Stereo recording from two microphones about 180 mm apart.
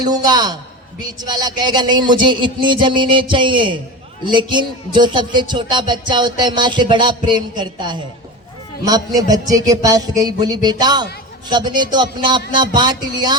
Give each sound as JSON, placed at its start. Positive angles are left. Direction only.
{"t": 0.0, "sound": "speech", "side_deg": -20}